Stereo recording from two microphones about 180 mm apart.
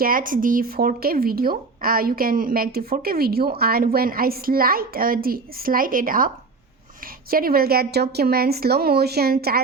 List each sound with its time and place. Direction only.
0.0 s speech: 50° right (ahead or behind)